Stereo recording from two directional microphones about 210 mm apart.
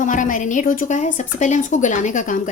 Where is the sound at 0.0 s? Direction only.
40° left (ahead or behind).